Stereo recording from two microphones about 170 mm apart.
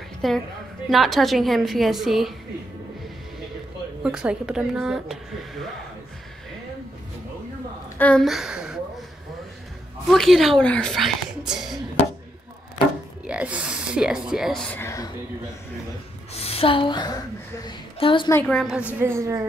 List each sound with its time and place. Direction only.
0.2 s speech: centre (ahead or behind)
4.0 s speech: 5° right (ahead or behind)
8.0 s a woman's voice: 5° left (ahead or behind)
10.0 s speech: centre (ahead or behind)
13.3 s speech: 5° right (ahead or behind); by 15.0 s 15° left (ahead or behind)
16.3 s a woman's voice: 35° left (ahead or behind)
18.3 s speech: 5° left (ahead or behind)
18.8 s a woman's voice: 10° right (ahead or behind)